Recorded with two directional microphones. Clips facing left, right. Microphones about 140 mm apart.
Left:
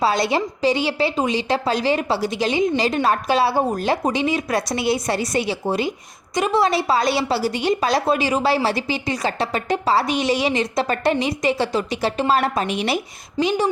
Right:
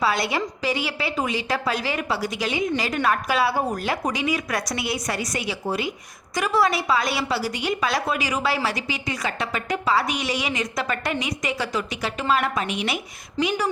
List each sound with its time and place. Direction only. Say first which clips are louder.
0.0 s a woman's voice: left 4 dB; 30° left (ahead or behind)